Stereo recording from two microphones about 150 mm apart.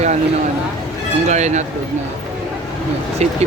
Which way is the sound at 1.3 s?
50° right (ahead or behind).